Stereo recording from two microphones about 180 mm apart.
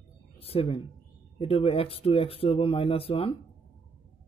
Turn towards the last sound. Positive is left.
turn(degrees=30)  # may be behind; listen again after turning